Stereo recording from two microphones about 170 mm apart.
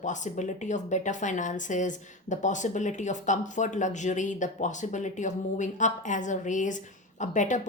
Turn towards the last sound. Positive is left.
turn(degrees=45)  # may be behind; listen again after turning